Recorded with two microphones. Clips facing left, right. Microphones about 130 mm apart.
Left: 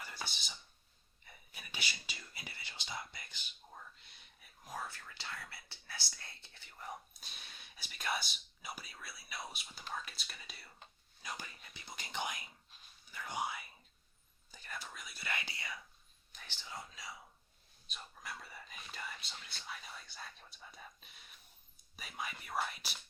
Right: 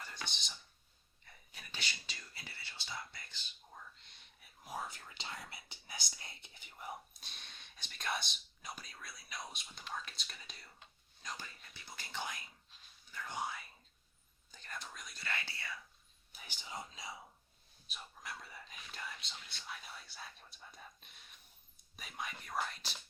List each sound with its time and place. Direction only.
0.0 s whispering: 5° left (ahead or behind)
4.7 s speech: 15° right (ahead or behind); by 15.8 s 15° left (ahead or behind)
16.3 s speech: 10° right (ahead or behind)
17.8 s speech: centre (ahead or behind)